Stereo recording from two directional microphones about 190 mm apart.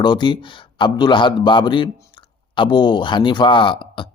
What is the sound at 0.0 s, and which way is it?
A man's voice, 25° left (ahead or behind).